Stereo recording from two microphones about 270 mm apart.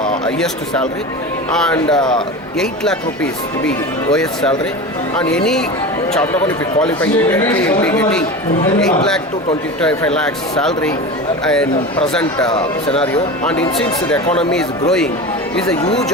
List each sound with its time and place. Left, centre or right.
0.3 s speech: centre
3.7 s speech: centre
6.1 s speech: centre
9.8 s speech: centre
12.5 s speech: centre
13.4 s speech: centre